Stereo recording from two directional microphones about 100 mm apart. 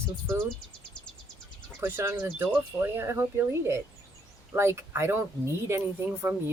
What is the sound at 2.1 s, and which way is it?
Speech, 20° right (ahead or behind).